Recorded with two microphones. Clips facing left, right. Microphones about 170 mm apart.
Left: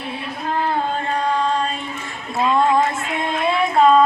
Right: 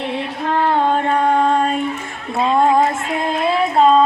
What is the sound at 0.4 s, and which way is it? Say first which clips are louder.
Female singing: right 5 dB; 65° right (ahead or behind).